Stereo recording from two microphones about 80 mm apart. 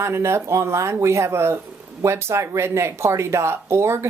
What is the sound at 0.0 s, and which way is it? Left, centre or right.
Speech, right.